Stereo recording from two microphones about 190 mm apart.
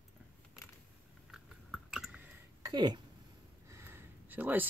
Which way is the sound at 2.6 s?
20° right (ahead or behind).